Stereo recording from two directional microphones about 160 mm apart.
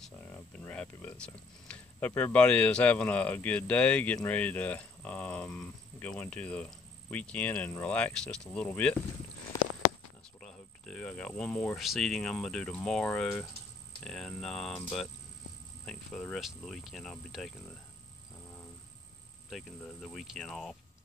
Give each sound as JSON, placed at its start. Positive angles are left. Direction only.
{"t": 0.0, "sound": "speech", "side_deg": 10}
{"t": 9.5, "sound": "a sound", "side_deg": 20}
{"t": 10.4, "sound": "speech", "side_deg": 5}
{"t": 19.5, "sound": "speech", "side_deg": 0}